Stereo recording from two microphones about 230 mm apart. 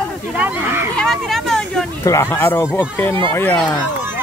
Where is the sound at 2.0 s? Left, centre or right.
Centre.